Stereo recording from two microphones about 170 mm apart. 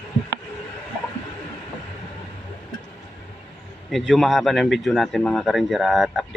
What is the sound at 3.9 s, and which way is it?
Speech, centre (ahead or behind).